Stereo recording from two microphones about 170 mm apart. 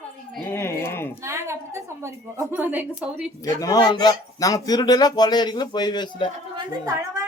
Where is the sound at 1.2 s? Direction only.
15° right (ahead or behind).